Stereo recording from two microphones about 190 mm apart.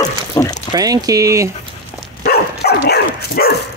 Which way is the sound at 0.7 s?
20° right (ahead or behind).